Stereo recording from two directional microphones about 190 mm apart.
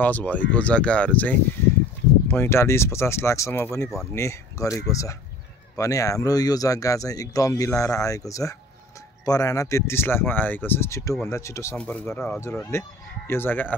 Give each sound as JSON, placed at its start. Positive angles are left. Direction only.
{"t": 0.0, "sound": "speech", "side_deg": 10}